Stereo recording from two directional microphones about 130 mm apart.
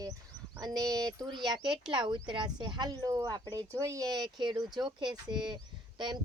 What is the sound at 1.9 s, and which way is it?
Speech, 35° right (ahead or behind).